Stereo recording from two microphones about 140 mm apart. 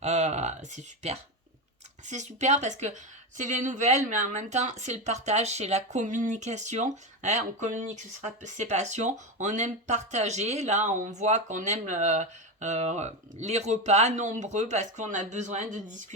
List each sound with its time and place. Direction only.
0.0 s a woman's voice: 55° right (ahead or behind)